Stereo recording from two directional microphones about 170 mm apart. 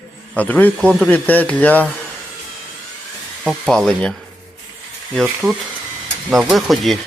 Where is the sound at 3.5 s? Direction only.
Centre (ahead or behind).